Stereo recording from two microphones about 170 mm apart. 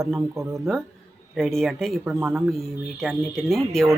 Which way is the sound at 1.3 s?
5° left (ahead or behind).